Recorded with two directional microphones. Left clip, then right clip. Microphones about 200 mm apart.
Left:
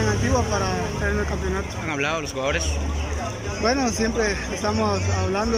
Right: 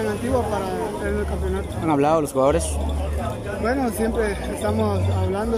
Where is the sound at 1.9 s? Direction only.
30° right (ahead or behind).